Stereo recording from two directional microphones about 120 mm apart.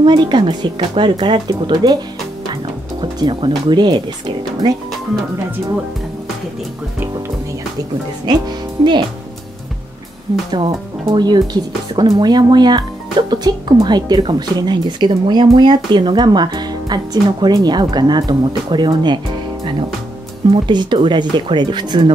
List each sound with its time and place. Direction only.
0.0 s speech: 40° right (ahead or behind)
3.0 s speech: 40° right (ahead or behind)
8.3 s speech: 40° right (ahead or behind)
10.3 s speech: 40° right (ahead or behind)
20.6 s speech: 40° right (ahead or behind)